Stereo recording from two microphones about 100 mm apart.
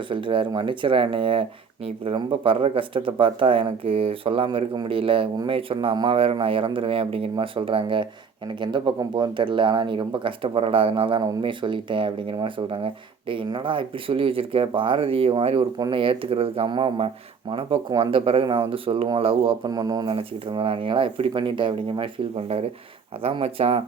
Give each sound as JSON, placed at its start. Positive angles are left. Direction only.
{"t": 0.1, "sound": "speech", "side_deg": -60}
{"t": 4.5, "sound": "speech", "side_deg": -55}
{"t": 16.6, "sound": "speech", "side_deg": -50}
{"t": 17.5, "sound": "speech", "side_deg": -60}
{"t": 18.4, "sound": "speech", "side_deg": -55}
{"t": 19.6, "sound": "speech", "side_deg": -40}
{"t": 20.1, "sound": "speech", "side_deg": -60}